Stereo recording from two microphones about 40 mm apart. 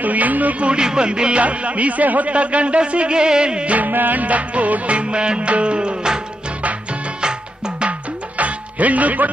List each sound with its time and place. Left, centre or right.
0.0 s speech: right
0.7 s speech: right
1.4 s music: right
3.7 s music: right
8.4 s music: right